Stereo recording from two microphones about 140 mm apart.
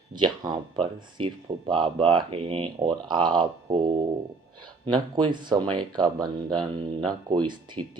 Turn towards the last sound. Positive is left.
turn(degrees=-35)  # may be behind; listen again after turning